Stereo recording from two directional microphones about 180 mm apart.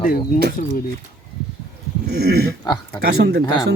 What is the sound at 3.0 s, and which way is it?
Speech, 65° right (ahead or behind).